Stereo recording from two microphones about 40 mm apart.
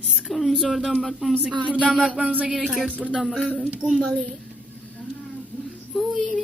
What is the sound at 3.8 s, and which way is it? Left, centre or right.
Speech, centre.